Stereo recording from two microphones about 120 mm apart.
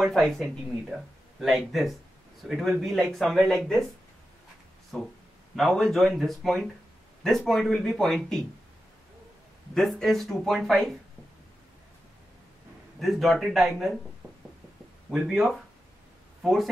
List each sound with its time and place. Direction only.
0.0 s speech: centre (ahead or behind)
4.9 s speech: 5° left (ahead or behind)
9.8 s speech: 5° left (ahead or behind)
13.0 s speech: centre (ahead or behind)
15.0 s speech: 5° right (ahead or behind)